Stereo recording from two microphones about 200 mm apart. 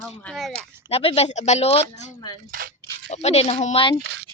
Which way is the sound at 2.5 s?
45° right (ahead or behind).